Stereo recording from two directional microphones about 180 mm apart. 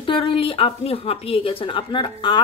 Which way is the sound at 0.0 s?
30° left (ahead or behind).